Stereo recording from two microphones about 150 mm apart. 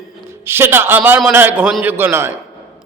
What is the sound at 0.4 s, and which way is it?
A man's voice, 15° right (ahead or behind).